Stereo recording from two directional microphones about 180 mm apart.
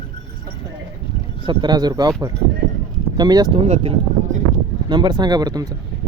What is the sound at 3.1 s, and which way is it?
Speech, 20° right (ahead or behind).